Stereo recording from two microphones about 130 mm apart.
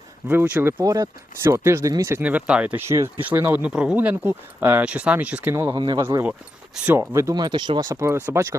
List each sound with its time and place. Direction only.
0.3 s speech: 15° right (ahead or behind)
2.2 s speech: 10° right (ahead or behind)
2.8 s speech: 20° right (ahead or behind)
5.7 s speech: 30° right (ahead or behind)
6.0 s speech: 20° right (ahead or behind)
7.9 s speech: 20° right (ahead or behind)